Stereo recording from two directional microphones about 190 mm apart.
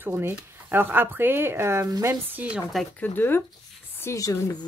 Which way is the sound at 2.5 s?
Centre (ahead or behind).